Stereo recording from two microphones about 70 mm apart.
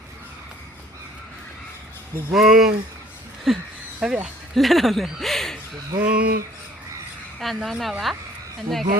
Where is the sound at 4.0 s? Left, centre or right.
Centre.